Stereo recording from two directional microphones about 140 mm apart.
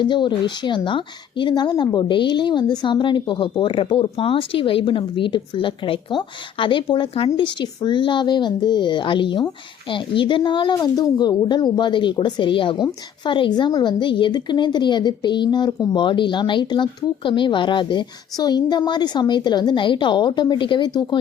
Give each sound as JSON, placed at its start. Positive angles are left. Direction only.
{"t": 0.0, "sound": "speech", "side_deg": 35}